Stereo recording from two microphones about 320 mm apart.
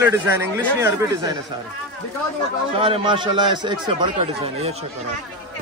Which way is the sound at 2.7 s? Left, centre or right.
Centre.